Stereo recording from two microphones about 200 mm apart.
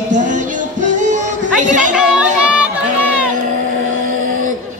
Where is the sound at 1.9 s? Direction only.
5° right (ahead or behind).